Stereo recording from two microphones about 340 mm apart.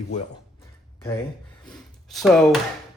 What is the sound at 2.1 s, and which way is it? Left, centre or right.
Speech, centre.